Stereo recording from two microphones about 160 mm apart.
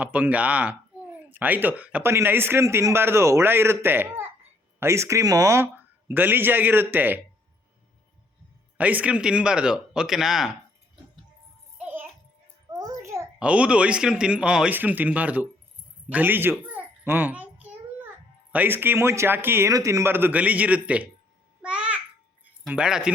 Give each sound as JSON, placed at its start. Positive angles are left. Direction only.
{"t": 0.0, "sound": "speech", "side_deg": -10}
{"t": 8.8, "sound": "speech", "side_deg": -10}
{"t": 11.8, "sound": "music", "side_deg": -10}
{"t": 12.7, "sound": "a sound", "side_deg": -20}
{"t": 13.4, "sound": "speech", "side_deg": -5}
{"t": 16.0, "sound": "babbling", "side_deg": -10}
{"t": 18.5, "sound": "speech", "side_deg": -10}
{"t": 21.6, "sound": "babbling", "side_deg": -5}
{"t": 22.6, "sound": "speech", "side_deg": -5}